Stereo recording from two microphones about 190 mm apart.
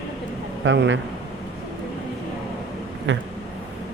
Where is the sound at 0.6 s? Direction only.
80° right.